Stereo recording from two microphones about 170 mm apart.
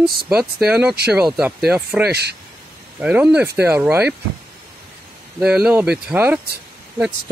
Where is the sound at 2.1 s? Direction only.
75° right (ahead or behind).